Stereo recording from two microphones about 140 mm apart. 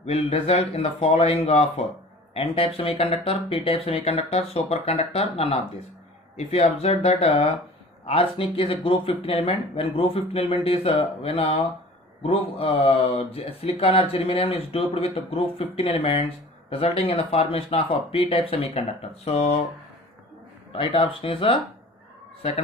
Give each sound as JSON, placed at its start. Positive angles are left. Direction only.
{"t": 0.0, "sound": "speech", "side_deg": 45}
{"t": 20.7, "sound": "speech", "side_deg": 40}